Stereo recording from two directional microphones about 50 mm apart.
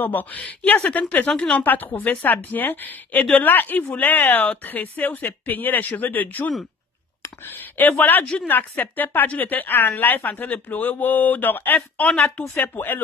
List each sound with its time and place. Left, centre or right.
0.0 s a woman's voice: left
1.3 s a woman's voice: centre
2.0 s a woman's voice: left
8.0 s a woman's voice: left